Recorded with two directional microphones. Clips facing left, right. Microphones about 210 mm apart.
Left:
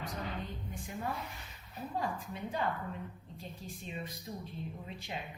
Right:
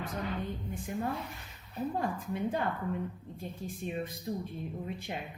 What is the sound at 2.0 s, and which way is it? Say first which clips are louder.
A woman's voice: right 1 dB; 55° right (ahead or behind).